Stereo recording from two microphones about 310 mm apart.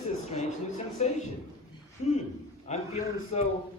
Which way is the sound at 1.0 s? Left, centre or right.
Left.